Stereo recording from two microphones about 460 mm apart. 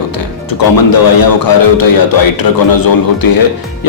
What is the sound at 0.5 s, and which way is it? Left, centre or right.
Speech, left.